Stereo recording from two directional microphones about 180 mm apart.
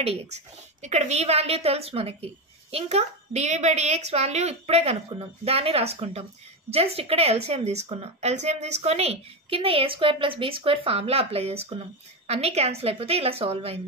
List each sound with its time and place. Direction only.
0.0 s a woman's voice: 35° right (ahead or behind)